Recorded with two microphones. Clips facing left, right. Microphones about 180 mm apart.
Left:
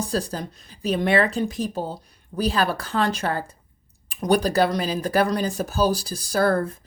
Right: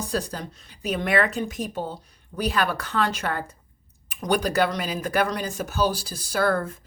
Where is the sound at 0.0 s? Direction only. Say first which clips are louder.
Left 2 dB; 30° left (ahead or behind).